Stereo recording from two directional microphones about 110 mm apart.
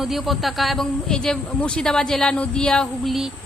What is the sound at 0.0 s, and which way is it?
Speech, centre (ahead or behind).